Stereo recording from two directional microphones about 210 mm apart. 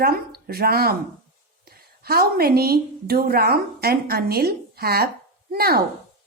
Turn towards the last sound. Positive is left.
turn(degrees=-45)  # may be behind; listen again after turning